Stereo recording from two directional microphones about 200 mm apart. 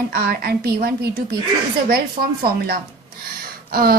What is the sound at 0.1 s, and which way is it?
A woman's voice, 50° right (ahead or behind).